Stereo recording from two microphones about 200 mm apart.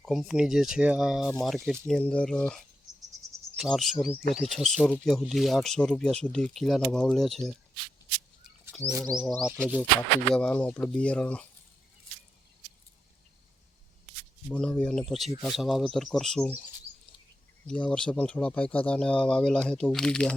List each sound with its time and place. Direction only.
0.0 s speech: centre (ahead or behind)
3.6 s speech: centre (ahead or behind)
8.8 s speech: 20° right (ahead or behind)
9.0 s speech: centre (ahead or behind)
14.5 s speech: 5° left (ahead or behind)
17.7 s speech: 5° left (ahead or behind)